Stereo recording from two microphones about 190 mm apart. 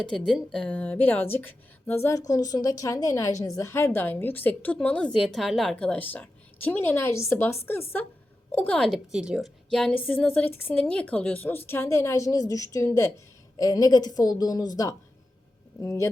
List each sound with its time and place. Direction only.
0.3 s a woman's voice: centre (ahead or behind); by 14.7 s 20° left (ahead or behind)
15.8 s a woman's voice: 15° left (ahead or behind)